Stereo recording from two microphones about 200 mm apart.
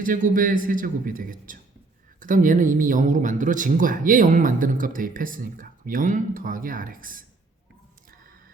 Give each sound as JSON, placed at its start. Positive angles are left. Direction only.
{"t": 0.0, "sound": "speech", "side_deg": -40}